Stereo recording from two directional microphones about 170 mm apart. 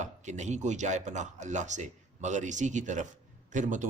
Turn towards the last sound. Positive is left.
turn(degrees=-50)  # may be behind; listen again after turning